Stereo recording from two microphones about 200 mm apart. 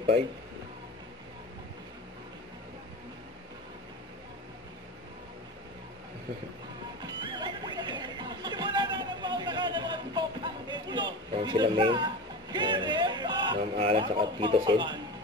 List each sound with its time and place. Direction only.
7.0 s music: 20° right (ahead or behind)